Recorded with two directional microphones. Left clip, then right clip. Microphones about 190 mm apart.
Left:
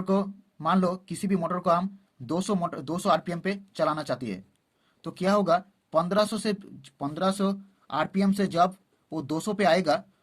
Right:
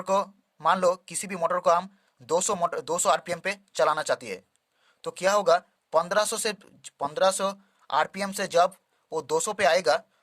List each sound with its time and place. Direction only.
0.0 s speech: 35° right (ahead or behind)